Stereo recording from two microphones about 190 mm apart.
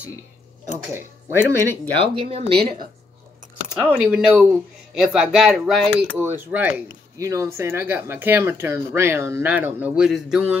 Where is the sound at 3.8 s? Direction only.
5° right (ahead or behind).